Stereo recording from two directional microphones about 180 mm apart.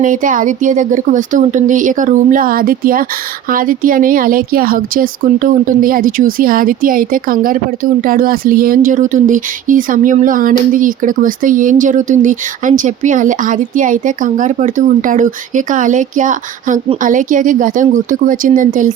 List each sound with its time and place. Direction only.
0.0 s speech: 45° right (ahead or behind)